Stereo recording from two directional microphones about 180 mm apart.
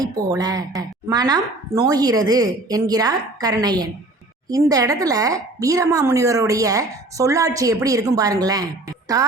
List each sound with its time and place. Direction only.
0.0 s speech: 20° right (ahead or behind)